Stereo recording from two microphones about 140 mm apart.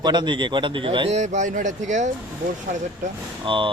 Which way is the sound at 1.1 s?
55° right (ahead or behind).